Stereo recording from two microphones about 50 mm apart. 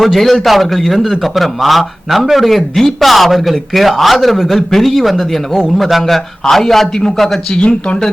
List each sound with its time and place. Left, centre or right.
0.0 s a man's voice: centre